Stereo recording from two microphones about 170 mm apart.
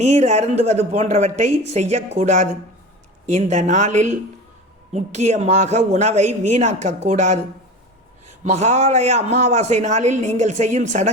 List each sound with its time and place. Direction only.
0.0 s a man's voice: 40° right (ahead or behind)